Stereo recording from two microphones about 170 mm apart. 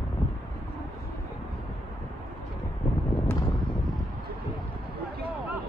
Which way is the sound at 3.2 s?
15° left (ahead or behind).